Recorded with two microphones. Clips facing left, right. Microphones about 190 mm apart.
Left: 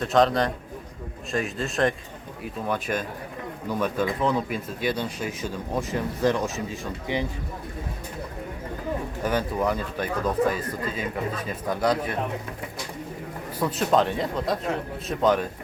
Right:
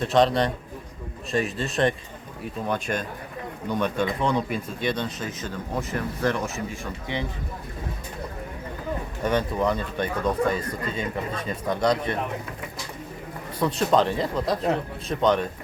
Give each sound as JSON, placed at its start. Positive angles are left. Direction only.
{"t": 0.0, "sound": "speech", "side_deg": 0}
{"t": 9.2, "sound": "speech", "side_deg": 5}
{"t": 13.6, "sound": "speech", "side_deg": 5}